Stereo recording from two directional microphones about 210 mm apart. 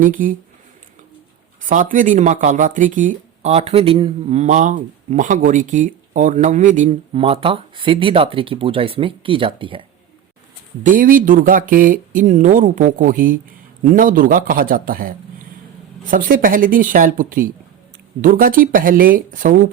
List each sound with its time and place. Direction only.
0.0 s speech: 40° right (ahead or behind)
1.6 s speech: 40° right (ahead or behind)
10.8 s speech: 40° right (ahead or behind)